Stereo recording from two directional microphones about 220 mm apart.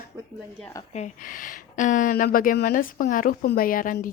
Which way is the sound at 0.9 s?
35° left (ahead or behind).